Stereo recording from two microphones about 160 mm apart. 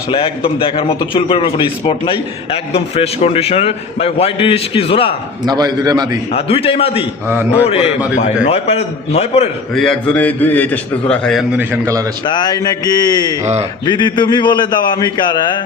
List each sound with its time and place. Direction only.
0.1 s a man's voice: 30° left (ahead or behind)
5.5 s a man's voice: 25° right (ahead or behind)
6.3 s a man's voice: 35° left (ahead or behind)
7.3 s a man's voice: 15° right (ahead or behind)
7.7 s a man's voice: 40° left (ahead or behind)
9.7 s a man's voice: 5° left (ahead or behind)
11.5 s a man's voice: 15° right (ahead or behind)
12.2 s a man's voice: 30° left (ahead or behind)
13.4 s speech: 45° right (ahead or behind)
13.8 s a man's voice: 30° left (ahead or behind)